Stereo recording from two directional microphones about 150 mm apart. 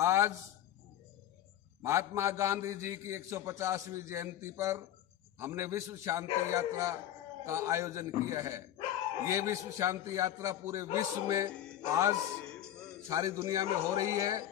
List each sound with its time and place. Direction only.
0.0 s a sound: 15° right (ahead or behind)
1.8 s a man's voice: 15° right (ahead or behind)
12.5 s music: 5° left (ahead or behind)
13.1 s a man's voice: 20° right (ahead or behind)